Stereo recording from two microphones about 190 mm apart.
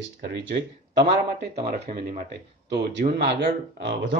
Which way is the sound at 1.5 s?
40° right (ahead or behind).